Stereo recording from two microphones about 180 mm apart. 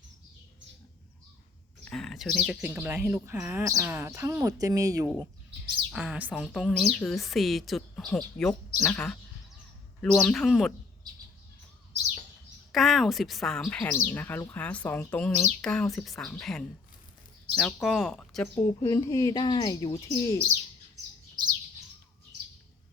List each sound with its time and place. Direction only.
1.8 s speech: 5° left (ahead or behind); by 5.0 s 20° right (ahead or behind)
5.9 s speech: 5° right (ahead or behind)
12.7 s speech: centre (ahead or behind)
18.6 s speech: 15° left (ahead or behind)